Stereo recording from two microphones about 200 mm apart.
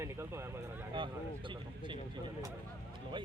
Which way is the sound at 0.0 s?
15° right (ahead or behind).